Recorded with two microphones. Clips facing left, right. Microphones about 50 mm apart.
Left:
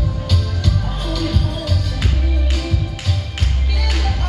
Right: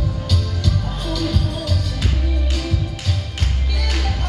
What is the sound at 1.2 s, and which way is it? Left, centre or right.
Music, left.